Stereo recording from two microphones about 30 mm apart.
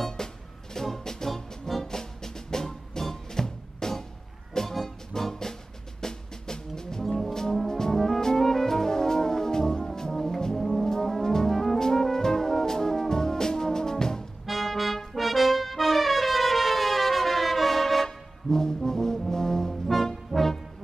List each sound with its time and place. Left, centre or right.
0.2 s music: left
7.1 s brass instrument: centre
7.6 s brass instrument: centre
8.2 s music: centre
8.5 s brass instrument: centre
14.4 s music: centre
15.1 s brass instrument: centre
18.0 s music: centre
18.9 s brass instrument: centre
19.7 s brass instrument: centre
20.2 s music: centre